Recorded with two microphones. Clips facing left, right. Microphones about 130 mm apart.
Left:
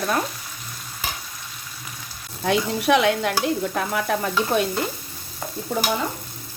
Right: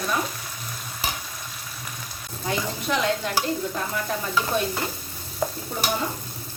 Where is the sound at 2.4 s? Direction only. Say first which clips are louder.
Left 7 dB; 70° left (ahead or behind).